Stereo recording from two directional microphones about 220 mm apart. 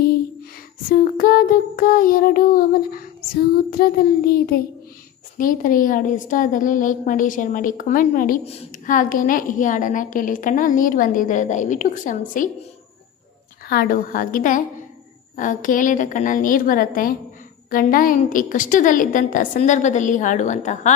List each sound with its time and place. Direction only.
0.9 s a woman's voice: 40° left (ahead or behind)
3.7 s child singing: 45° left (ahead or behind)
5.4 s a woman's voice: 40° left (ahead or behind)
13.7 s a woman's voice: 40° left (ahead or behind)